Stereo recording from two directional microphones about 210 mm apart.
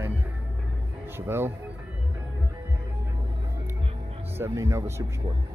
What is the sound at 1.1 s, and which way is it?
Speech, 10° right (ahead or behind).